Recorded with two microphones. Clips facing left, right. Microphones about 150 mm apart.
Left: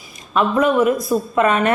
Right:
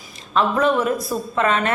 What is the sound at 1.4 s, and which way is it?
Speech, 20° left (ahead or behind).